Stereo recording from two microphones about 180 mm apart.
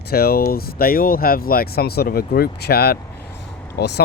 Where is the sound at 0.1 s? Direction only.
55° left (ahead or behind).